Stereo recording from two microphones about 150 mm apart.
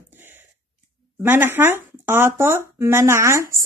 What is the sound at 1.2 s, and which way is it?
A woman's voice, 15° right (ahead or behind).